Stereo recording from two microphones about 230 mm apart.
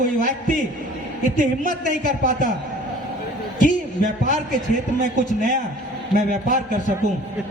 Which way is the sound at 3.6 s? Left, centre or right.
Right.